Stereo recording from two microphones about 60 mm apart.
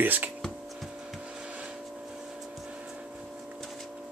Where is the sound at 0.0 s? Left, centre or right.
Right.